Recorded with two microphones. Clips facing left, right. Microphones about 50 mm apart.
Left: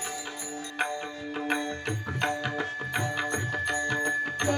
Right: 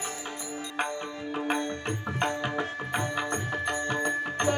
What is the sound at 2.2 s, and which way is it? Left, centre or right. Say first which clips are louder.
Music: even; right.